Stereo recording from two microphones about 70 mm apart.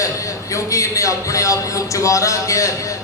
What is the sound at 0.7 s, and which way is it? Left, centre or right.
A woman's voice, left.